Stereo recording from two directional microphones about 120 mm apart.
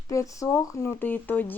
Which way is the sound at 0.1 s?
25° left (ahead or behind).